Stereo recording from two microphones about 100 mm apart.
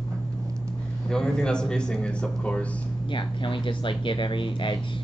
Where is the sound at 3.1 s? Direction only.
55° left (ahead or behind).